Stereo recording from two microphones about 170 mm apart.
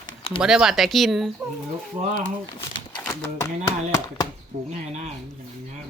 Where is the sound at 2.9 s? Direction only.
15° left (ahead or behind).